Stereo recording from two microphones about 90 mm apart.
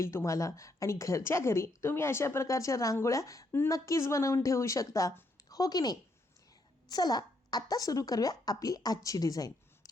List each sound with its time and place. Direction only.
0.0 s a woman's voice: 30° left (ahead or behind)